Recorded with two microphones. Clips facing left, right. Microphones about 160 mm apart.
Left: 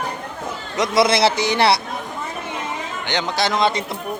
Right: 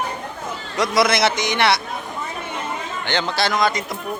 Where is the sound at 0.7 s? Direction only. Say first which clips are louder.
Left 1 dB; 25° left (ahead or behind).